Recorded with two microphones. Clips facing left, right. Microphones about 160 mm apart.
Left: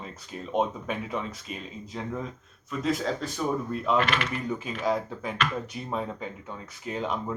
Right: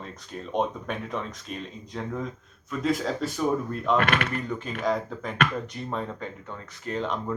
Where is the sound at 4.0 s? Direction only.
50° right (ahead or behind).